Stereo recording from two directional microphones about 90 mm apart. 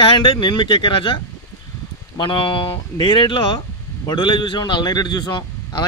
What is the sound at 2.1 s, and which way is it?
Speech, 70° left (ahead or behind).